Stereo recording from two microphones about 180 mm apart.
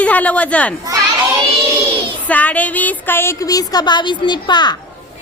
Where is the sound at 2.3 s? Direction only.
10° left (ahead or behind); by 4.7 s 25° left (ahead or behind).